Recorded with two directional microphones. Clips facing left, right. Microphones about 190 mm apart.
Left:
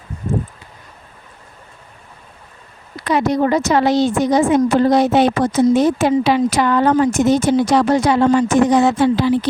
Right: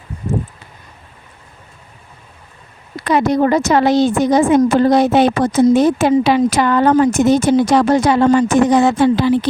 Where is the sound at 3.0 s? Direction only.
50° right (ahead or behind).